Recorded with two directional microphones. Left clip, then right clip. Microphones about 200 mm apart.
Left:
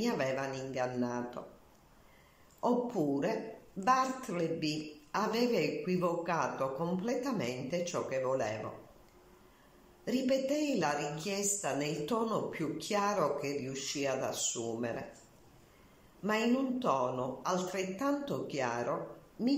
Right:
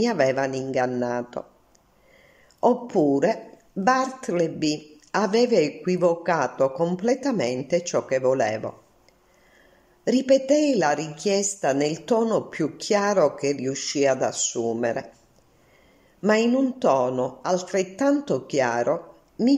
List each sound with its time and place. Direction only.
0.0 s a man's voice: 45° right (ahead or behind)
2.6 s a woman's voice: 40° right (ahead or behind)
10.0 s a man's voice: 45° right (ahead or behind)
16.2 s a man's voice: 45° right (ahead or behind)